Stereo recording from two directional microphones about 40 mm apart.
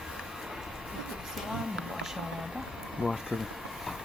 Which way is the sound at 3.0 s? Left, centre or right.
Right.